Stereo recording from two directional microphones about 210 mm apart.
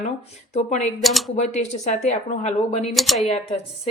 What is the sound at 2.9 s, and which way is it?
Speech, centre (ahead or behind).